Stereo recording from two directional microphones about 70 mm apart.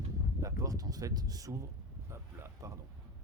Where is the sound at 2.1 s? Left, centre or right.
Right.